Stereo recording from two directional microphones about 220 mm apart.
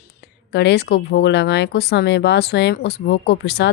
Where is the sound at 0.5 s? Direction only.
50° left (ahead or behind).